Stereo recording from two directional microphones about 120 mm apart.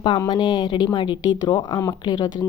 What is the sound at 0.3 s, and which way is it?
Speech, 40° left (ahead or behind).